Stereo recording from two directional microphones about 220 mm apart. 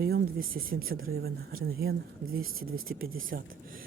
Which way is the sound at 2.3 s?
70° right (ahead or behind).